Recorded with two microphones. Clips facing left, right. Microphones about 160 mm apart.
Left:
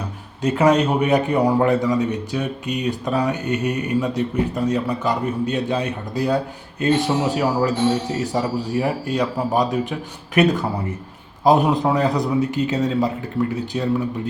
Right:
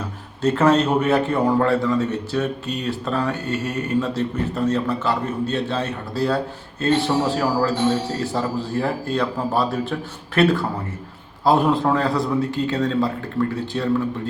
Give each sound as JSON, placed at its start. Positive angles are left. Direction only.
{"t": 0.4, "sound": "a man's voice", "side_deg": 15}